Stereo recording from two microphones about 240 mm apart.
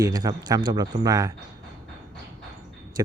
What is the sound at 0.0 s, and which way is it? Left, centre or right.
Speech, centre.